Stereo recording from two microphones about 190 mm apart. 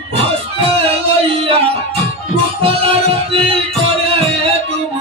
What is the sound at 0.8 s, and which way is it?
Music, 30° right (ahead or behind).